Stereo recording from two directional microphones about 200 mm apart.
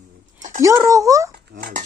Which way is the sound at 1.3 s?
45° right (ahead or behind).